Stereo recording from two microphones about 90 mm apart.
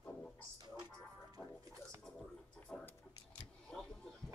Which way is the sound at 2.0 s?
10° left (ahead or behind).